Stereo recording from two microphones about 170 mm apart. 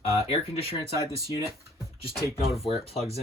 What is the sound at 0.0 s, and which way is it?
Speech, 35° left (ahead or behind).